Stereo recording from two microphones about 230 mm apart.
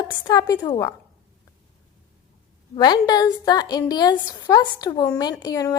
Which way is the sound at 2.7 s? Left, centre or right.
Centre.